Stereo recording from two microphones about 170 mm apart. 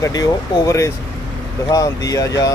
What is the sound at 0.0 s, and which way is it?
Speech, 20° left (ahead or behind).